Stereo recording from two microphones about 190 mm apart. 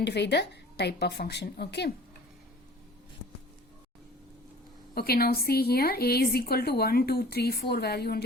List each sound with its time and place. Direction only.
0.0 s a woman's voice: 60° left (ahead or behind)
4.9 s a woman's voice: 55° left (ahead or behind)